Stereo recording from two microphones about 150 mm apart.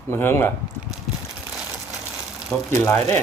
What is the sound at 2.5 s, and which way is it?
Speech, 5° left (ahead or behind).